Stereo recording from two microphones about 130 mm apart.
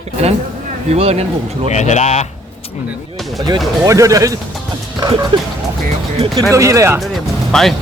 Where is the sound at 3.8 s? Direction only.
25° right (ahead or behind).